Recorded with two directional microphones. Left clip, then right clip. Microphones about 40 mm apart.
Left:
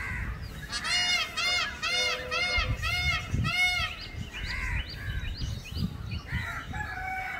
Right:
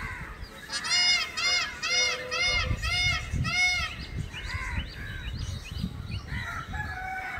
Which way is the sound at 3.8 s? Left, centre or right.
Centre.